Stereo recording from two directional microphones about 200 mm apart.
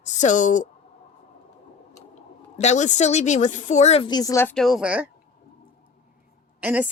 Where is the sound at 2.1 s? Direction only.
35° left (ahead or behind); by 4.5 s 15° left (ahead or behind).